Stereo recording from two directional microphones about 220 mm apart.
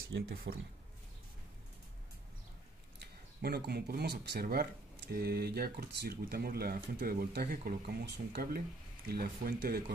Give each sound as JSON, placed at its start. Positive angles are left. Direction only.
{"t": 0.3, "sound": "speech", "side_deg": -45}
{"t": 3.0, "sound": "speech", "side_deg": -45}